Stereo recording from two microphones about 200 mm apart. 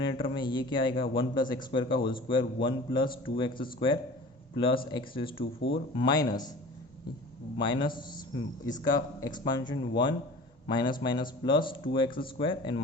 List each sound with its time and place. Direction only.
0.1 s a man's voice: 25° left (ahead or behind)
7.6 s a man's voice: 25° left (ahead or behind)